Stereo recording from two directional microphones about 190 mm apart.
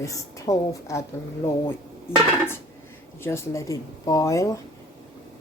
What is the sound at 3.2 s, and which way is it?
Speech, 15° left (ahead or behind).